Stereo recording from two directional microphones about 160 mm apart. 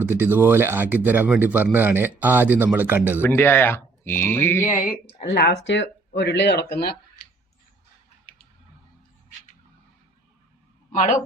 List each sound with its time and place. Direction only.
0.0 s speech: 15° right (ahead or behind)
3.2 s speech: 15° left (ahead or behind)
5.3 s speech: 90° left
10.9 s speech: 55° left (ahead or behind)